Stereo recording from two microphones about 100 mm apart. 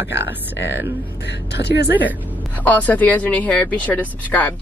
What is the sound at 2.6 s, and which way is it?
Speech, 15° left (ahead or behind).